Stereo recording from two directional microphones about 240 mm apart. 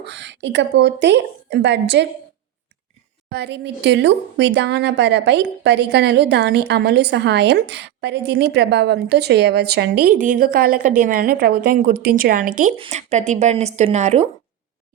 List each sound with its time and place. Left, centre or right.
0.0 s a woman's voice: right
3.2 s a woman's voice: right